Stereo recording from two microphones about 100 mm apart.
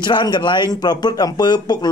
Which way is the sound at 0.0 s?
50° left (ahead or behind).